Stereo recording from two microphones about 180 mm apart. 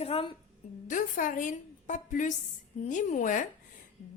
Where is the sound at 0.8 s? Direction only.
45° left (ahead or behind).